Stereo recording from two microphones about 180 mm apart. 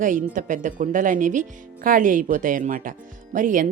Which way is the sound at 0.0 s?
45° right (ahead or behind).